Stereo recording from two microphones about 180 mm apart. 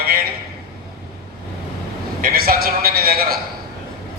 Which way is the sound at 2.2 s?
55° right (ahead or behind).